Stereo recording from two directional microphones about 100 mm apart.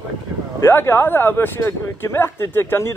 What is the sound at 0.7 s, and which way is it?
Speech, 25° left (ahead or behind).